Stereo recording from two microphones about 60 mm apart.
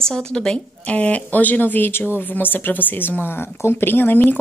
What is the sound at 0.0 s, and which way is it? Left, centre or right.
A woman's voice, centre.